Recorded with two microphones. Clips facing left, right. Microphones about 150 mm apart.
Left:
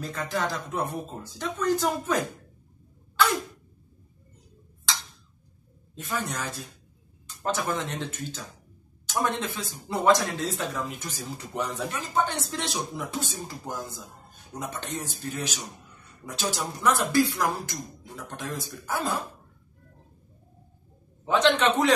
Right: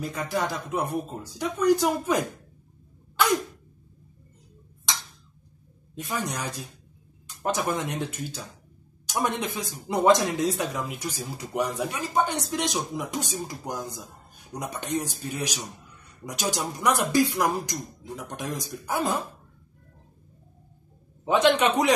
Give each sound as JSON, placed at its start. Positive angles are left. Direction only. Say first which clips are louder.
{"t": 0.0, "sound": "speech", "louder": "right 1 dB", "side_deg": -10}
{"t": 3.2, "sound": "sneeze", "louder": "right 1 dB", "side_deg": -15}
{"t": 4.9, "sound": "tick-tock", "louder": "even", "side_deg": -20}
{"t": 5.9, "sound": "speech", "louder": "right 1 dB", "side_deg": -15}
{"t": 21.3, "sound": "speech", "louder": "right 1 dB", "side_deg": -15}